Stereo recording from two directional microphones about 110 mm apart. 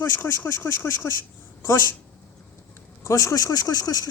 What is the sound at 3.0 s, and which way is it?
Speech, 30° left (ahead or behind).